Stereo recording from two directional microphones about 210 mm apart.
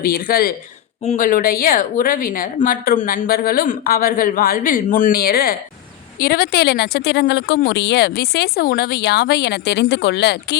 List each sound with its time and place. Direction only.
0.0 s speech: 45° left (ahead or behind)